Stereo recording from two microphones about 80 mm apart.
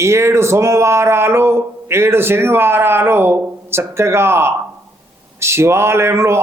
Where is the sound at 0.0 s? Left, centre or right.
Right.